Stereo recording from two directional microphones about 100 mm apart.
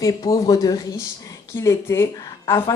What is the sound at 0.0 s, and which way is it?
Speech, 35° left (ahead or behind).